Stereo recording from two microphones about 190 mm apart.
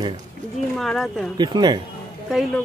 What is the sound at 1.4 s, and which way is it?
Speech, 25° right (ahead or behind).